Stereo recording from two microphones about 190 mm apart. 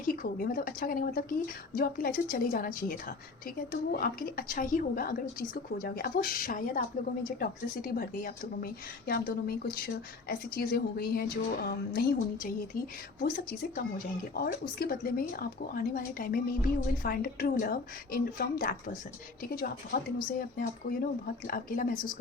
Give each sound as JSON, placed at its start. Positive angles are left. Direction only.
{"t": 0.1, "sound": "a woman's voice", "side_deg": 50}